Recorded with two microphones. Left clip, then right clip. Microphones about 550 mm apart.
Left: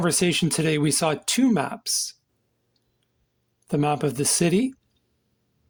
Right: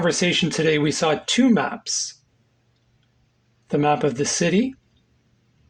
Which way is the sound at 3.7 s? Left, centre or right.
Left.